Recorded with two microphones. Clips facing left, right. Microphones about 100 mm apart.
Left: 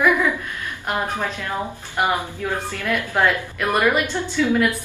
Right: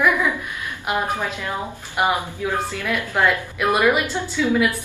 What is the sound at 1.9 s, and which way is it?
A woman's voice, 15° right (ahead or behind).